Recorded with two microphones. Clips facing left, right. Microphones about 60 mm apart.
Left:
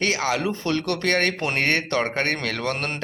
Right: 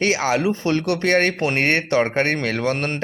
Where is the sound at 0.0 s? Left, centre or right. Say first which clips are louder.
Right 4 dB; right.